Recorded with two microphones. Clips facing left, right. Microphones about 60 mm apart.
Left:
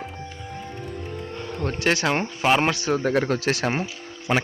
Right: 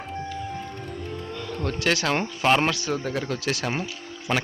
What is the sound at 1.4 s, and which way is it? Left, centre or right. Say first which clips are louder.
Speech: left 1 dB; left.